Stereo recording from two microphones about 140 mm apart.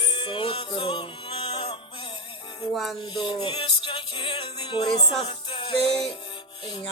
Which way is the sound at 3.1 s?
35° left (ahead or behind).